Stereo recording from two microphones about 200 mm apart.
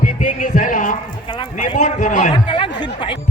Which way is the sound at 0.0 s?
40° left (ahead or behind).